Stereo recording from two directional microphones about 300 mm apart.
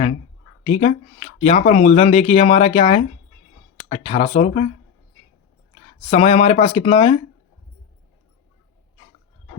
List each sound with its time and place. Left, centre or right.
0.6 s speech: left
5.7 s speech: left